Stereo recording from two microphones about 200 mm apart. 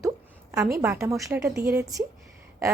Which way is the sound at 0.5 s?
15° right (ahead or behind).